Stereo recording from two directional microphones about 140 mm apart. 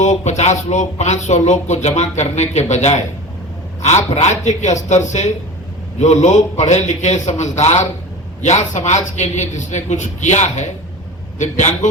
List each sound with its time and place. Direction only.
0.0 s speech: 55° left (ahead or behind)